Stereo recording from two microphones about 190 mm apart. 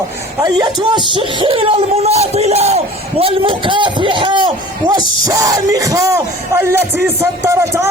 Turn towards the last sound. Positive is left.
turn(degrees=-15)  # may be behind; listen again after turning